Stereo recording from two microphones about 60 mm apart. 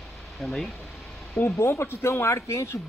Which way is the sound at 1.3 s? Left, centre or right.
Left.